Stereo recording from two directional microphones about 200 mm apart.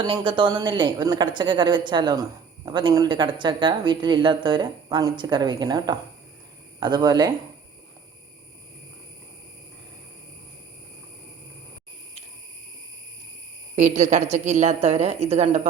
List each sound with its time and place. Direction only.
0.0 s speech: 25° right (ahead or behind)
13.7 s a woman's voice: 35° right (ahead or behind)